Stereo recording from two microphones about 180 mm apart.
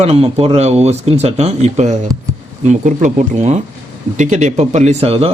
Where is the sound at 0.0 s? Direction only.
35° right (ahead or behind).